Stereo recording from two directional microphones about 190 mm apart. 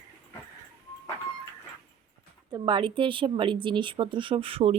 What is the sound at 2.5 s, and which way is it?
Speech, 25° right (ahead or behind).